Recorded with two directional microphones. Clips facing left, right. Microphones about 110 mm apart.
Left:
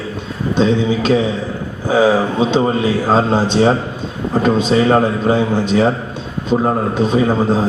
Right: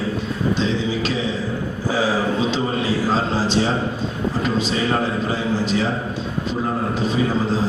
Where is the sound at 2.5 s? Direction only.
50° left (ahead or behind).